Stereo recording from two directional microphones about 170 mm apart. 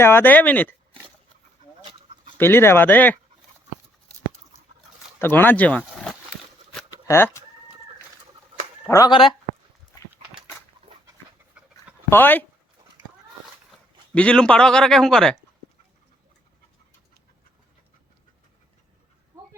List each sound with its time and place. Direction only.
0.0 s speech: 15° left (ahead or behind)
2.4 s speech: 15° left (ahead or behind)
5.2 s speech: 10° left (ahead or behind)
8.9 s speech: 25° left (ahead or behind)
12.1 s speech: 10° left (ahead or behind)
13.7 s a man's voice: 5° left (ahead or behind)